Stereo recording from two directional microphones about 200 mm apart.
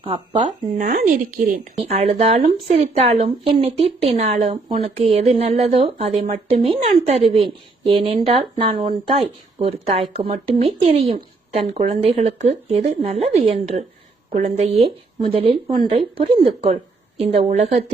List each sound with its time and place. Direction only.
0.0 s a woman's voice: 25° right (ahead or behind)
0.4 s a woman's voice: 40° right (ahead or behind)
1.8 s a woman's voice: 30° right (ahead or behind)